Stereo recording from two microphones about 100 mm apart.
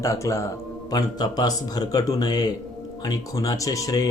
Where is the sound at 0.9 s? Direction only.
45° left (ahead or behind).